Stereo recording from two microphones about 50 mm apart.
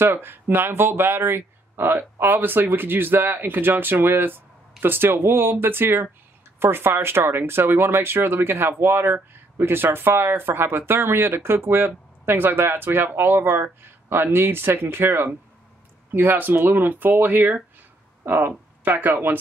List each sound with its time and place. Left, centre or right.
0.0 s speech: right
18.2 s a sound: right
18.9 s speech: right